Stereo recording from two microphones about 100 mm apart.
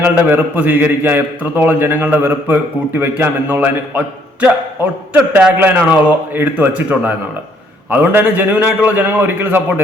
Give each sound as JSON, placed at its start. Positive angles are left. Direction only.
{"t": 0.0, "sound": "a man's voice", "side_deg": -20}